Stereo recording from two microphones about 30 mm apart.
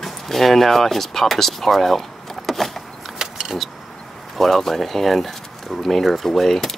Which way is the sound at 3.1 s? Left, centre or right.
Centre.